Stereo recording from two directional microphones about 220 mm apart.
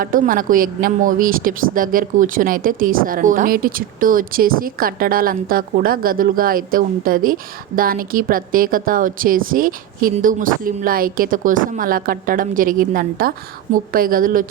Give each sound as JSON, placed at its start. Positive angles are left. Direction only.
{"t": 0.0, "sound": "a woman's voice", "side_deg": -40}